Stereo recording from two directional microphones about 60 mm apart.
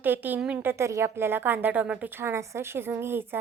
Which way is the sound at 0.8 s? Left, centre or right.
Right.